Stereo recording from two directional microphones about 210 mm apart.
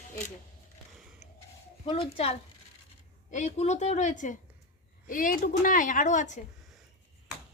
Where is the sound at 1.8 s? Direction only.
25° left (ahead or behind).